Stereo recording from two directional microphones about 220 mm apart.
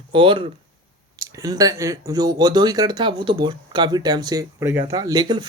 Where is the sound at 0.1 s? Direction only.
25° right (ahead or behind).